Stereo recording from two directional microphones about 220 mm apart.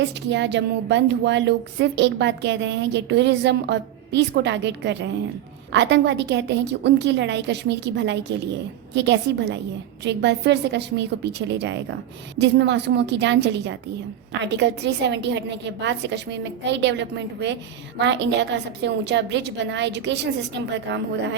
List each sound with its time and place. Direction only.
0.0 s a woman's voice: 50° right (ahead or behind)